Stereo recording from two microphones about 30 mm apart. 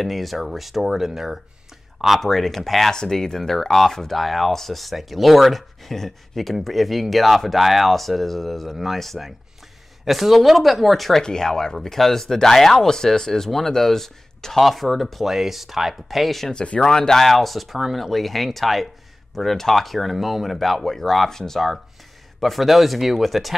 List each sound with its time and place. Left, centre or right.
0.0 s speech: centre
2.2 s speech: centre
2.9 s speech: centre
10.0 s speech: centre
11.2 s speech: centre
15.2 s speech: centre
16.8 s speech: left
17.2 s speech: centre
22.4 s speech: centre